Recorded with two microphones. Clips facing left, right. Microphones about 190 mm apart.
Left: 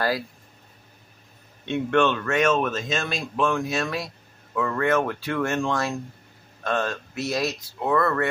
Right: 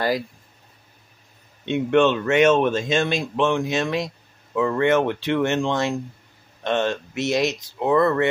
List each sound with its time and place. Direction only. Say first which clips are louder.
1.7 s speech: right 4 dB; 20° right (ahead or behind)